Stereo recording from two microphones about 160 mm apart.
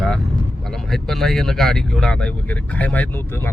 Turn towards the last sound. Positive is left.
turn(degrees=10)  # may be behind; listen again after turning